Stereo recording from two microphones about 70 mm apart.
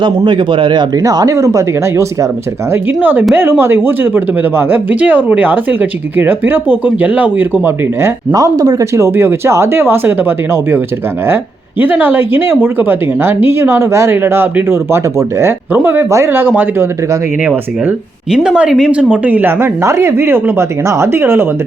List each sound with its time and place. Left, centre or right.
0.7 s speech: right
1.0 s speech: right
2.7 s speech: right
8.3 s speech: right
8.8 s speech: right
11.8 s speech: right
16.3 s speech: right
18.4 s speech: centre
19.1 s speech: right
19.8 s speech: right